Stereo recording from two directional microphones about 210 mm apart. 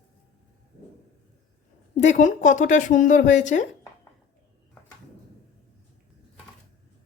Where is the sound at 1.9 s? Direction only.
35° left (ahead or behind).